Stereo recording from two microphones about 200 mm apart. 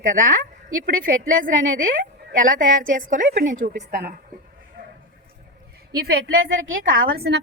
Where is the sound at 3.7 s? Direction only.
60° right (ahead or behind).